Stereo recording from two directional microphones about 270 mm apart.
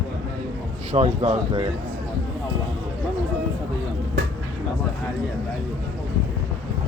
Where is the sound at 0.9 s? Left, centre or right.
Right.